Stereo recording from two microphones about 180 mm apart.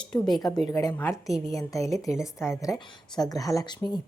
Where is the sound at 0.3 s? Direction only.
20° left (ahead or behind).